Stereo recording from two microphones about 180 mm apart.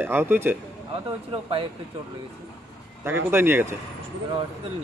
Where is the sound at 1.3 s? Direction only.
30° right (ahead or behind).